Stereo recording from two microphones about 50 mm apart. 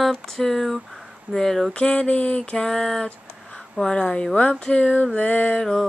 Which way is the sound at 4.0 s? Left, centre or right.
Left.